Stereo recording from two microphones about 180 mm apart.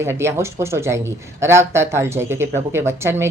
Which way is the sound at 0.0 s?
15° right (ahead or behind).